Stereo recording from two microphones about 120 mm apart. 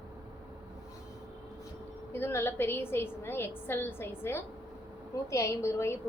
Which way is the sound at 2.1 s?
20° left (ahead or behind).